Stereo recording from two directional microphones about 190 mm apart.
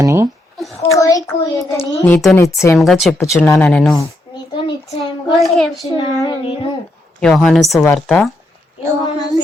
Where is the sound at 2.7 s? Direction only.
Centre (ahead or behind).